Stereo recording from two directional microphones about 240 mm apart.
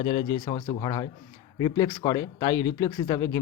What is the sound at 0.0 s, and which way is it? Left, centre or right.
Speech, left.